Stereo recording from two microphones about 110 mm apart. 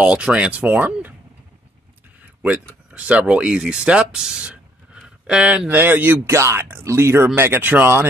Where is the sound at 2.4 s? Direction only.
10° right (ahead or behind).